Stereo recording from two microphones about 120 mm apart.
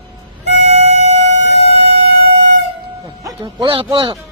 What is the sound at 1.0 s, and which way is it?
Vehicle, 65° right (ahead or behind).